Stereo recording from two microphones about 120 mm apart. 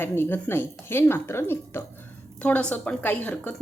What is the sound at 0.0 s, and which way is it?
Speech, 20° left (ahead or behind).